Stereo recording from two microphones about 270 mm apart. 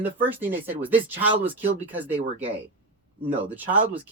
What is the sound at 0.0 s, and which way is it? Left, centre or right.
Speech, centre.